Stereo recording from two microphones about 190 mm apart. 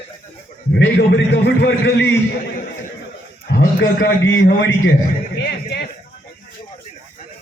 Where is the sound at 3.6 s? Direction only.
75° left (ahead or behind).